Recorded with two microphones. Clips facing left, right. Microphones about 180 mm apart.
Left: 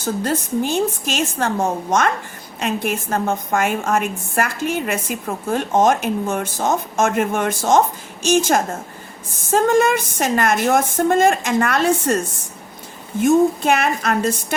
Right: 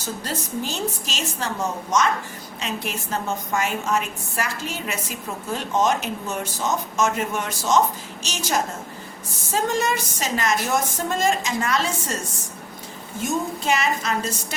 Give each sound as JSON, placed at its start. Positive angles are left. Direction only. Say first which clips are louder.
{"t": 0.0, "sound": "a woman's voice", "louder": "left 8 dB", "side_deg": 55}
{"t": 13.2, "sound": "a woman's voice", "louder": "left 10 dB", "side_deg": 55}